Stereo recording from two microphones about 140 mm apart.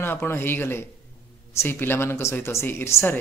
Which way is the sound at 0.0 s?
15° left (ahead or behind).